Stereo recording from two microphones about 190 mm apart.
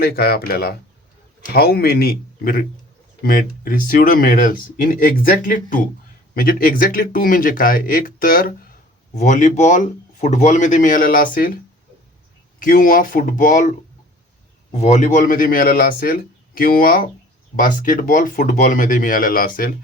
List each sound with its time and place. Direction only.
0.0 s speech: 55° left (ahead or behind)
12.5 s speech: 45° left (ahead or behind)